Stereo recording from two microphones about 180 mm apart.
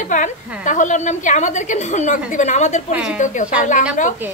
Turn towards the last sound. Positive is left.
turn(degrees=45)  # may be behind; listen again after turning